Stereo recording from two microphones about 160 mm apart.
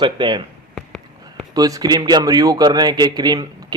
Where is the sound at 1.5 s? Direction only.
25° right (ahead or behind).